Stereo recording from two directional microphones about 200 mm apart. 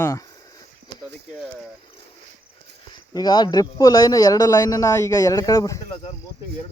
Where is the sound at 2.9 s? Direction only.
20° left (ahead or behind).